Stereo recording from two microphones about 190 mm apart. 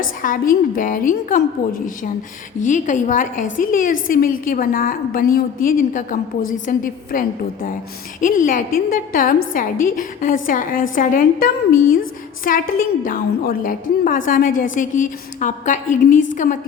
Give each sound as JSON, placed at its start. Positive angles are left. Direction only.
{"t": 0.2, "sound": "a woman's voice", "side_deg": 45}
{"t": 2.6, "sound": "a woman's voice", "side_deg": 40}